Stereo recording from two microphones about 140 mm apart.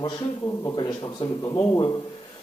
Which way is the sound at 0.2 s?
20° left (ahead or behind).